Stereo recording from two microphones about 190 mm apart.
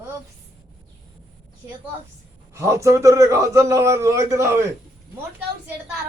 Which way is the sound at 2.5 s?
15° right (ahead or behind).